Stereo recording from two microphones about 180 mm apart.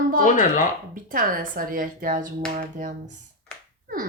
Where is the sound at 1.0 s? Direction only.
50° right (ahead or behind).